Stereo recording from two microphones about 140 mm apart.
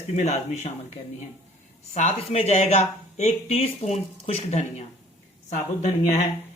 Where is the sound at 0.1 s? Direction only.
55° left (ahead or behind).